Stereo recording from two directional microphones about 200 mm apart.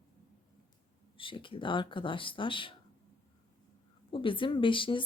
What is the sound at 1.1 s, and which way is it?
A woman's voice, 25° left (ahead or behind).